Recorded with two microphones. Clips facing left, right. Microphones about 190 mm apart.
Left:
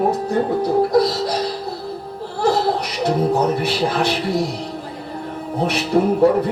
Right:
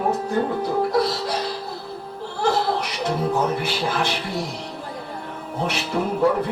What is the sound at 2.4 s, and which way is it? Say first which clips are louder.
Music: left 4 dB; 35° left (ahead or behind).